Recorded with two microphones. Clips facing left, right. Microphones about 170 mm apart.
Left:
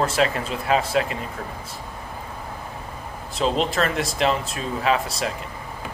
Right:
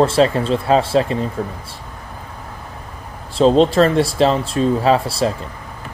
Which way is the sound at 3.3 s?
35° right (ahead or behind).